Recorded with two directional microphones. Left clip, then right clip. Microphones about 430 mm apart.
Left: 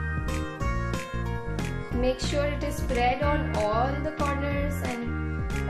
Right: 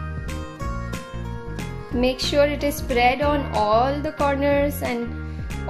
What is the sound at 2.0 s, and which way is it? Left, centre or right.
Music, centre.